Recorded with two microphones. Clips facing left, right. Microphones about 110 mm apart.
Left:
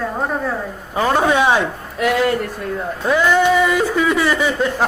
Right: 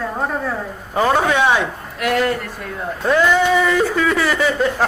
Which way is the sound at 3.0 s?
5° left (ahead or behind).